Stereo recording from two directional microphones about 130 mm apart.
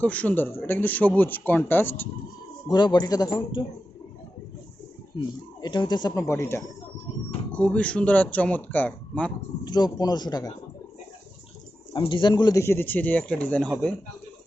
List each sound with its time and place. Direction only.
0.0 s speech: 10° left (ahead or behind)
2.6 s speech: 35° left (ahead or behind)
5.5 s speech: 35° left (ahead or behind)
7.1 s a sound: 45° left (ahead or behind)
7.5 s speech: 10° left (ahead or behind)
9.6 s speech: 30° left (ahead or behind)
11.9 s speech: 40° left (ahead or behind); by 13.9 s 10° left (ahead or behind)